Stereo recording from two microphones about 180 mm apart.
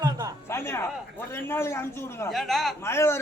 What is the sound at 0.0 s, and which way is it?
Music, 20° right (ahead or behind).